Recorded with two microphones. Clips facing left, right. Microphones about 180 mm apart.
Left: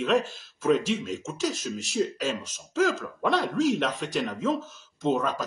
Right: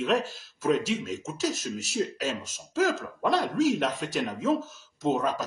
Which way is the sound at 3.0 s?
5° right (ahead or behind).